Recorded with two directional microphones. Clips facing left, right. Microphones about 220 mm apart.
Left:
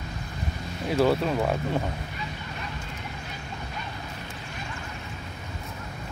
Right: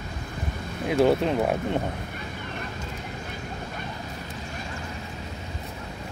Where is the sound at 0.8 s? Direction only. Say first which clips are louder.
Right 2 dB; 20° right (ahead or behind).